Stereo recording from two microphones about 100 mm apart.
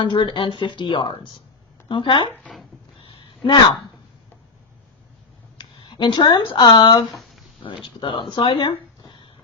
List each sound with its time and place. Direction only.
0.0 s speech: 55° left (ahead or behind)
2.3 s speech: 10° left (ahead or behind)
3.0 s a sound: 60° left (ahead or behind)
5.5 s speech: 50° left (ahead or behind)
7.1 s a sound: centre (ahead or behind)
8.0 s speech: 55° left (ahead or behind)